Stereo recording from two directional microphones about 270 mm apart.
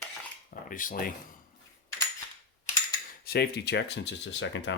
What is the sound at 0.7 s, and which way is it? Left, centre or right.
Speech, left.